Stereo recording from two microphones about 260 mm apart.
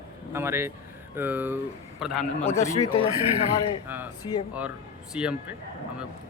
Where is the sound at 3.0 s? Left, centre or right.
Right.